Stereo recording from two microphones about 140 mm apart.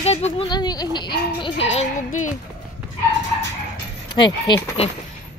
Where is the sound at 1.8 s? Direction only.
65° left (ahead or behind).